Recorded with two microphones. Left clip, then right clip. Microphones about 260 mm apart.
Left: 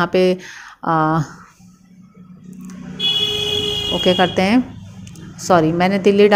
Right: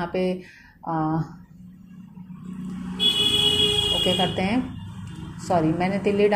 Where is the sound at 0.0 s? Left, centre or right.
Left.